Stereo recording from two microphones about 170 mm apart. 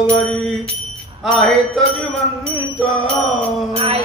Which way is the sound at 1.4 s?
Centre (ahead or behind).